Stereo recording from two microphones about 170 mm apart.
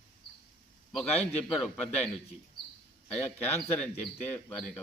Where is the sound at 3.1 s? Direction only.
10° left (ahead or behind).